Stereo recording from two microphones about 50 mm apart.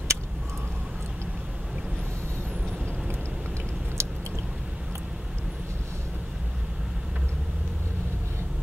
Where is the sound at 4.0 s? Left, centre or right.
Right.